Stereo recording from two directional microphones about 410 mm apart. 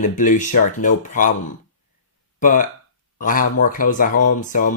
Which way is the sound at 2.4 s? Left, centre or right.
Centre.